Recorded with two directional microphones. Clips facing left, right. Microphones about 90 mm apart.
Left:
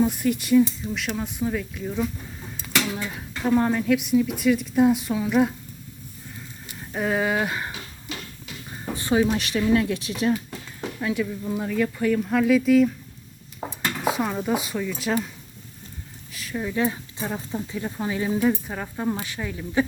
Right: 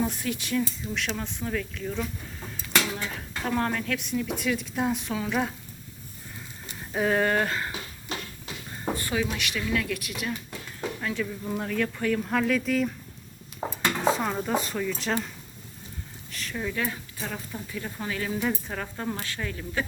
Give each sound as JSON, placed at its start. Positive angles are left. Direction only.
{"t": 0.0, "sound": "a woman's voice", "side_deg": 5}
{"t": 6.9, "sound": "a woman's voice", "side_deg": 0}
{"t": 9.0, "sound": "a sound", "side_deg": 20}
{"t": 9.2, "sound": "speech", "side_deg": 35}
{"t": 10.8, "sound": "a sound", "side_deg": 10}
{"t": 11.4, "sound": "a woman's voice", "side_deg": 5}
{"t": 14.0, "sound": "speech", "side_deg": 5}
{"t": 16.3, "sound": "speech", "side_deg": 5}
{"t": 16.6, "sound": "speech", "side_deg": 20}